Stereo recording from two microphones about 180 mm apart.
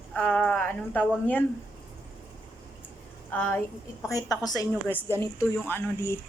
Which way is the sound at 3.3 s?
10° left (ahead or behind).